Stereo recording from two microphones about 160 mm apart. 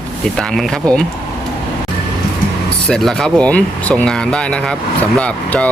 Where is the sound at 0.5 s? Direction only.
5° left (ahead or behind).